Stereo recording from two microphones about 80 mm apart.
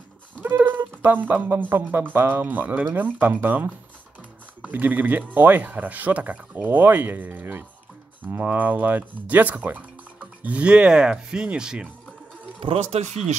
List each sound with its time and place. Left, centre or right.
0.4 s speech: right
12.6 s speech: right